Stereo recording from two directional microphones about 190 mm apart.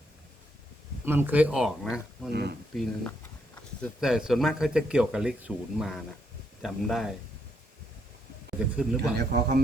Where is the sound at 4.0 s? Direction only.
5° right (ahead or behind).